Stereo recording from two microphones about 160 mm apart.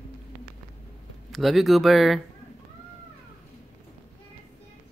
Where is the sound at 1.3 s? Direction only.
Centre (ahead or behind).